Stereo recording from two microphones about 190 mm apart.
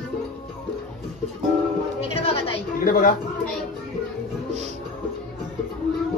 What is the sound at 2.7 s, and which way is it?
Speech, 50° left (ahead or behind).